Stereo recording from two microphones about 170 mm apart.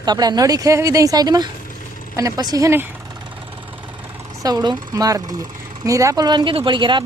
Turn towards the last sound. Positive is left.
turn(degrees=-30)  # may be behind; listen again after turning